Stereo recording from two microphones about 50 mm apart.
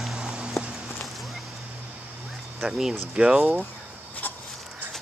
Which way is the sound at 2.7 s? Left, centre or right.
Centre.